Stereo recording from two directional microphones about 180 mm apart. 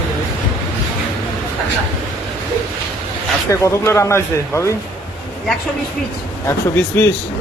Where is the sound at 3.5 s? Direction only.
15° left (ahead or behind).